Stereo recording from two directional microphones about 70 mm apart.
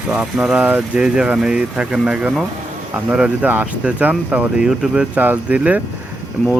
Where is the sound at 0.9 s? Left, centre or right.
Centre.